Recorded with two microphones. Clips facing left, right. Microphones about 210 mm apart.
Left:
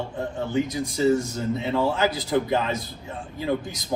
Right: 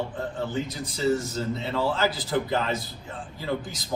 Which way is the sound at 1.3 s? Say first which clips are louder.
Left 3 dB; 15° left (ahead or behind).